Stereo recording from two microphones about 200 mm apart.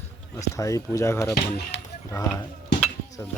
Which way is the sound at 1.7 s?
60° left (ahead or behind).